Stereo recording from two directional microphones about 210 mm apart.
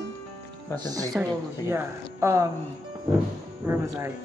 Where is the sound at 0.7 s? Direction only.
15° left (ahead or behind).